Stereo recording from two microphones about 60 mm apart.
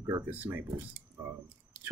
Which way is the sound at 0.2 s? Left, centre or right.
Right.